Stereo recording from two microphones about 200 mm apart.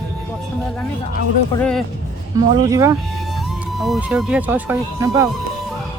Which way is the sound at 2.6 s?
15° right (ahead or behind).